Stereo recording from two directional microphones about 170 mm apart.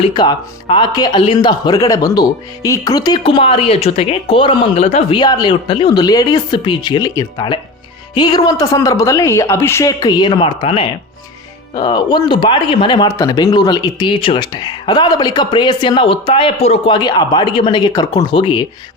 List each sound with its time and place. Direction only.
0.0 s speech: 25° left (ahead or behind)
5.2 s speech: 25° left (ahead or behind)